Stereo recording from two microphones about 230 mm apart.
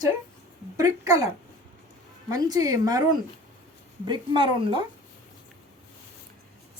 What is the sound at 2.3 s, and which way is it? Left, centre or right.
Speech, centre.